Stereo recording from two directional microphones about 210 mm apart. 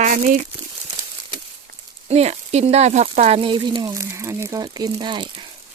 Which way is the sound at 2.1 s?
30° right (ahead or behind).